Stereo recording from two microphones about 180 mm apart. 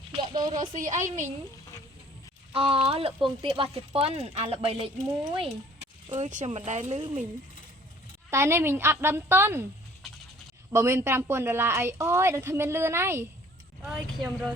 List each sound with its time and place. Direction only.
0.1 s a sound: 35° right (ahead or behind)
0.3 s speech: 20° right (ahead or behind)
0.6 s a woman's voice: 45° right (ahead or behind)
2.5 s speech: 30° right (ahead or behind)
6.1 s speech: 40° right (ahead or behind)
8.3 s speech: 15° right (ahead or behind)
10.7 s speech: 15° right (ahead or behind)
13.8 s speech: centre (ahead or behind)